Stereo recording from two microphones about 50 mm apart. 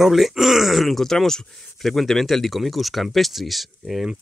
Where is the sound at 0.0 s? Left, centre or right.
Centre.